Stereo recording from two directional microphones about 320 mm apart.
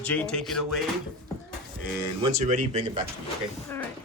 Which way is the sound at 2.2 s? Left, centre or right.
Right.